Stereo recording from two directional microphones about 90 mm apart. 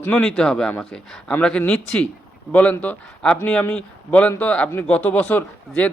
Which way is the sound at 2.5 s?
15° left (ahead or behind).